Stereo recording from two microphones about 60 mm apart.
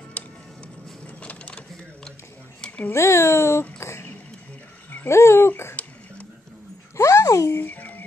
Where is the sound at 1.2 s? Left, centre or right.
Left.